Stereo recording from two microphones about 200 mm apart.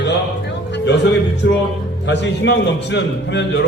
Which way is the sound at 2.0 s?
60° left (ahead or behind).